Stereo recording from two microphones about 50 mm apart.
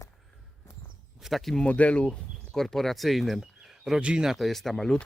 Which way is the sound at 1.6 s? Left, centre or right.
Left.